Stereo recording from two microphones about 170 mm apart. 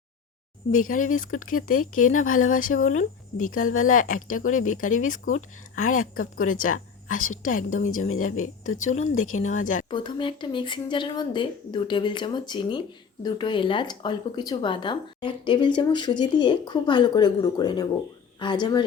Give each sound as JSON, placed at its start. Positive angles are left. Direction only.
{"t": 0.7, "sound": "speech", "side_deg": 50}
{"t": 9.9, "sound": "speech", "side_deg": 25}